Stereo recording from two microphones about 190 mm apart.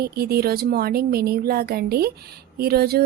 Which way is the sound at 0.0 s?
55° right (ahead or behind).